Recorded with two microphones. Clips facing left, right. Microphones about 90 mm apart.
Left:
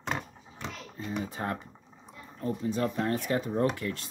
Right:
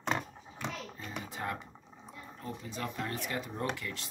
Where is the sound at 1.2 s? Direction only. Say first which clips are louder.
Left 4 dB; 35° left (ahead or behind).